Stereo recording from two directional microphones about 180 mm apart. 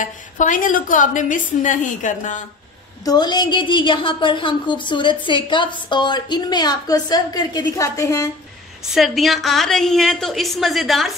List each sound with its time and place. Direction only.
0.0 s a woman's voice: 45° left (ahead or behind)
3.1 s a woman's voice: 25° left (ahead or behind)
8.9 s a woman's voice: centre (ahead or behind)